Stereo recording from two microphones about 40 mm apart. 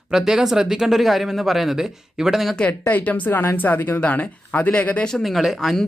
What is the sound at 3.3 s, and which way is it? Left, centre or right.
Speech, left.